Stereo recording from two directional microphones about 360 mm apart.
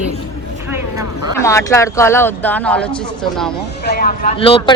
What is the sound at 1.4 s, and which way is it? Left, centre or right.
Speech, centre.